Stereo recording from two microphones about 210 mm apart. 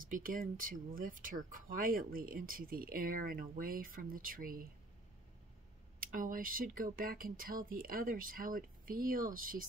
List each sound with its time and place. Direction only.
0.0 s speech: 40° right (ahead or behind)
5.9 s speech: 40° right (ahead or behind)